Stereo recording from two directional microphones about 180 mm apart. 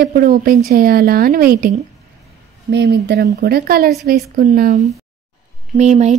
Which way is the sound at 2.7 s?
65° right (ahead or behind).